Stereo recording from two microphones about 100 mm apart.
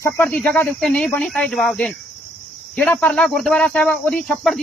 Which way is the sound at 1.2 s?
5° left (ahead or behind).